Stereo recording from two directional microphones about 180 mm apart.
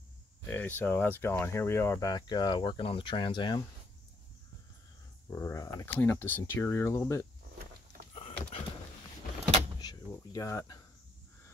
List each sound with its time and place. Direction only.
0.5 s speech: 10° left (ahead or behind)
5.3 s speech: 20° left (ahead or behind)
8.1 s a sound: 35° left (ahead or behind)
9.8 s insect: 20° left (ahead or behind)